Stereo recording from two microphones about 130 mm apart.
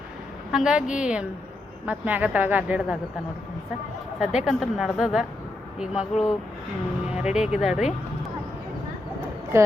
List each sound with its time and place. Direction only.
0.5 s a woman's voice: 5° right (ahead or behind)
4.2 s a woman's voice: 5° right (ahead or behind)
9.5 s a woman's voice: 20° right (ahead or behind)